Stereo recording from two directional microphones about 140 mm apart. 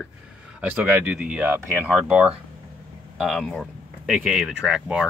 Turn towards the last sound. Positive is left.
turn(degrees=-5)  # may be behind; listen again after turning